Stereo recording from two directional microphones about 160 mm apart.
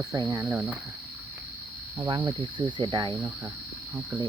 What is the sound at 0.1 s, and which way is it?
Speech, 20° right (ahead or behind).